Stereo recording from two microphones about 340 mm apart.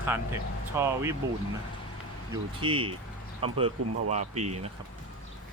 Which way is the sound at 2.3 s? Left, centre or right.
Centre.